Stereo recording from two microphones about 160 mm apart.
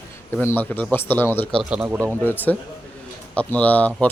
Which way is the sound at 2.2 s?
10° left (ahead or behind).